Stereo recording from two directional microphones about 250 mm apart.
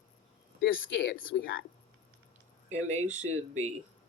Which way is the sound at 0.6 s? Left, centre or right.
Left.